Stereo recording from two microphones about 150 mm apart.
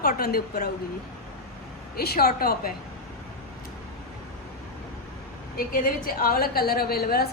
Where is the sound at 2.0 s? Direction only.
90° left.